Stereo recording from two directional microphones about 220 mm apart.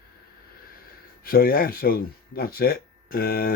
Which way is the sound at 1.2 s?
40° left (ahead or behind).